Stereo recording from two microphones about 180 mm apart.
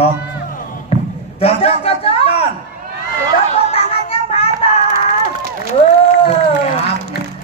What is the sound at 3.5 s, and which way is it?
Music, 35° left (ahead or behind).